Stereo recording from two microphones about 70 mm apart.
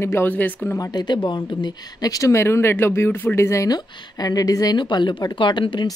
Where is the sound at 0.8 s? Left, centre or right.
Left.